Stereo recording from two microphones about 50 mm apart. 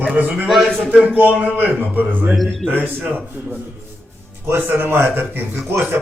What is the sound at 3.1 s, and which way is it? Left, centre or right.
Speech, right.